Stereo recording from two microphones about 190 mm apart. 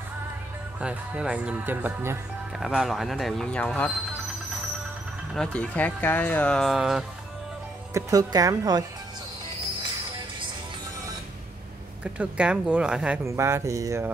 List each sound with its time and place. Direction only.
0.7 s speech: 5° right (ahead or behind)
5.3 s speech: 5° left (ahead or behind)
7.9 s speech: 20° right (ahead or behind)
12.0 s speech: 5° right (ahead or behind)